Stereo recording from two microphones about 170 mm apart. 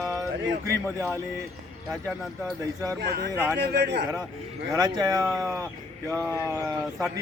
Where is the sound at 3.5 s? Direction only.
85° right.